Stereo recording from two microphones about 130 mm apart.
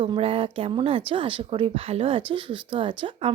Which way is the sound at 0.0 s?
45° right (ahead or behind).